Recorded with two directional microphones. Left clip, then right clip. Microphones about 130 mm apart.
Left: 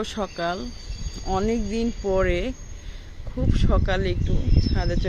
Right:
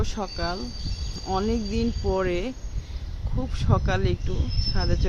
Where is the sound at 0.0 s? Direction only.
20° left (ahead or behind).